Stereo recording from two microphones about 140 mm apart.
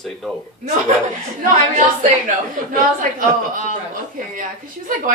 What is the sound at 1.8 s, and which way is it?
A woman's voice, 65° right (ahead or behind).